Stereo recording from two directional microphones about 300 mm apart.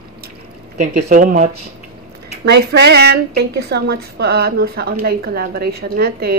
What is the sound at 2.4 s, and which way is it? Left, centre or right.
A woman's voice, right.